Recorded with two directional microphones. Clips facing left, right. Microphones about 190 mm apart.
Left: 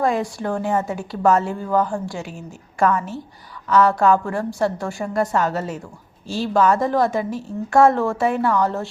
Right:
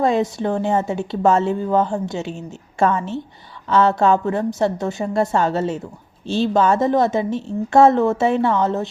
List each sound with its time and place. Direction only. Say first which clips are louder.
0.0 s a woman's voice: right 3 dB; 20° right (ahead or behind)